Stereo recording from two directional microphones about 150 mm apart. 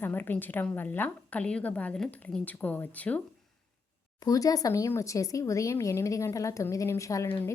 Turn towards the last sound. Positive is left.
turn(degrees=20)  # may be behind; listen again after turning